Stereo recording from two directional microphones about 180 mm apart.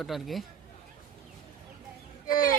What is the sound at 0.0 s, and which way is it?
Speech, centre (ahead or behind).